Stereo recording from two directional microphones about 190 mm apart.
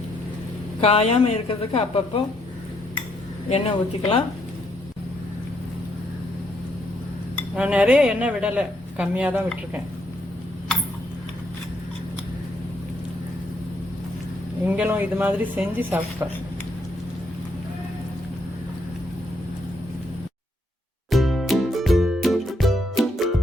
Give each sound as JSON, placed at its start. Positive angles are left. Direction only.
{"t": 0.8, "sound": "a woman's voice", "side_deg": 30}
{"t": 3.5, "sound": "speech", "side_deg": 30}
{"t": 7.5, "sound": "speech", "side_deg": -5}
{"t": 14.6, "sound": "speech", "side_deg": -10}
{"t": 21.1, "sound": "music", "side_deg": 0}